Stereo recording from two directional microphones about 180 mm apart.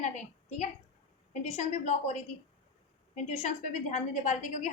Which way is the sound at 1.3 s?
40° left (ahead or behind).